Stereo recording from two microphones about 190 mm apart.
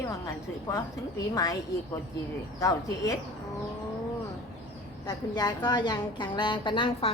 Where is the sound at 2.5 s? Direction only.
20° left (ahead or behind).